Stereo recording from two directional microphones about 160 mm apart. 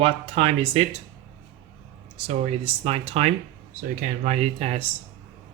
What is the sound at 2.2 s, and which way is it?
Speech, 35° right (ahead or behind).